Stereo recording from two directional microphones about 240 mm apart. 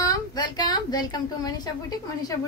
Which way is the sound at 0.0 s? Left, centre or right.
Centre.